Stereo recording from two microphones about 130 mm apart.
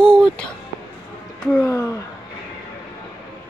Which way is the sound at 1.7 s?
20° left (ahead or behind).